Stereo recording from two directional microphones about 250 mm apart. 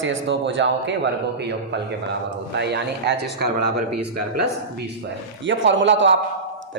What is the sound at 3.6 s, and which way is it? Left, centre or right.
Speech, right.